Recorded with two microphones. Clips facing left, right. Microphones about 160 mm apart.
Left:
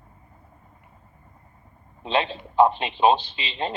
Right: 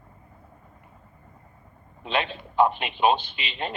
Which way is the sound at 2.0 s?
30° left (ahead or behind).